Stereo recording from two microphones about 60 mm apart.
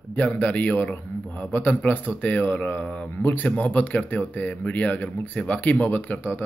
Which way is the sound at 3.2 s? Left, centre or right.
Left.